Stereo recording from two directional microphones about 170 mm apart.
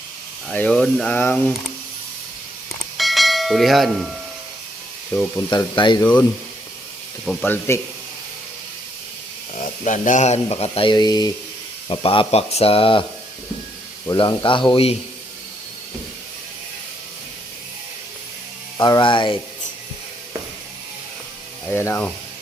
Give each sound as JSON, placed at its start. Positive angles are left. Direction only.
{"t": 0.4, "sound": "speech", "side_deg": 5}
{"t": 3.0, "sound": "bell", "side_deg": 0}
{"t": 5.1, "sound": "speech", "side_deg": 15}
{"t": 5.5, "sound": "speech", "side_deg": 25}
{"t": 6.0, "sound": "speech", "side_deg": 10}
{"t": 7.3, "sound": "speech", "side_deg": 10}
{"t": 9.6, "sound": "speech", "side_deg": 45}
{"t": 14.1, "sound": "speech", "side_deg": 25}
{"t": 18.8, "sound": "speech", "side_deg": 25}
{"t": 21.7, "sound": "speech", "side_deg": 10}